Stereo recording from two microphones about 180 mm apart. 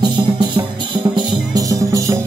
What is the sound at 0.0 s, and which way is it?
Music, 25° right (ahead or behind).